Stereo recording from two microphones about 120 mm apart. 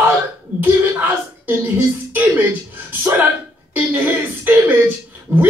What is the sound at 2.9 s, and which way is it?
Speech, 15° right (ahead or behind).